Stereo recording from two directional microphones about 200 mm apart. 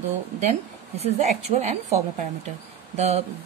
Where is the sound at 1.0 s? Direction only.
35° right (ahead or behind).